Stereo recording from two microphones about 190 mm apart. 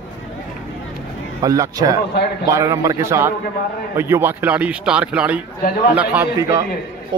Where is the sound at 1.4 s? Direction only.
20° right (ahead or behind).